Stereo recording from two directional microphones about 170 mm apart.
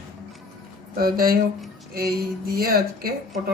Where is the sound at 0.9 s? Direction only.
60° right (ahead or behind).